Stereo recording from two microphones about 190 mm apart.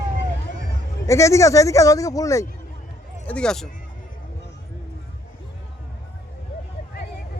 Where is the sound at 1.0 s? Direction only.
15° left (ahead or behind).